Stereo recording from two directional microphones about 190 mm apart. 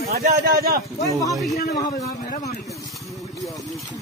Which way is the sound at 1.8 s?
20° left (ahead or behind).